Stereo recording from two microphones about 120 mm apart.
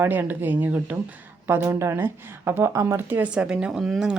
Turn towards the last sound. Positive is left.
turn(degrees=-5)  # may be behind; listen again after turning